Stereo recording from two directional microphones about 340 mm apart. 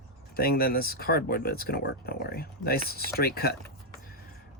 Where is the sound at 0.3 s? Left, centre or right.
Left.